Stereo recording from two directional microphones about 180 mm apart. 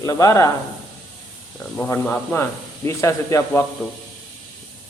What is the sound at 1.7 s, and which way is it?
A man's voice, 10° left (ahead or behind).